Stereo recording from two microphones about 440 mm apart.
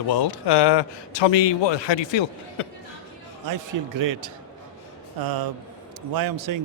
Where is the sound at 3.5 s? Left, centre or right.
Right.